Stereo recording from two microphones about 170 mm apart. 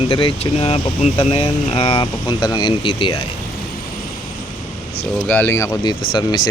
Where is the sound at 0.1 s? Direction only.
30° left (ahead or behind).